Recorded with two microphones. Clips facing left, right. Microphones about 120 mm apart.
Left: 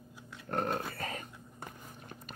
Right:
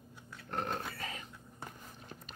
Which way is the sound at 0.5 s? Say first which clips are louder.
Left 4 dB; 50° left (ahead or behind).